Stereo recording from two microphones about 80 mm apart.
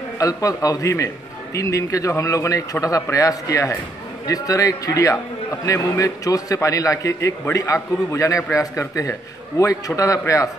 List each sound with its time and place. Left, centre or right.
0.2 s a man's voice: left